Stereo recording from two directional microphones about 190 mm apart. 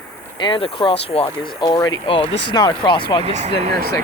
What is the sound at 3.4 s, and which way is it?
Speech, 35° right (ahead or behind).